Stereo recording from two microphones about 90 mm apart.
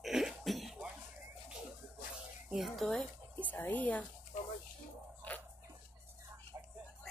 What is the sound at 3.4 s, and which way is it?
Speech, 20° left (ahead or behind).